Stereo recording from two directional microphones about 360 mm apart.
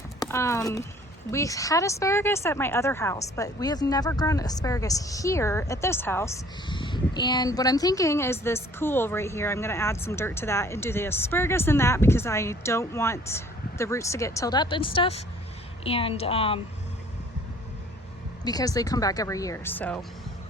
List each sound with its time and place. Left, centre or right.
0.2 s a sound: centre
1.3 s speech: centre
18.4 s speech: centre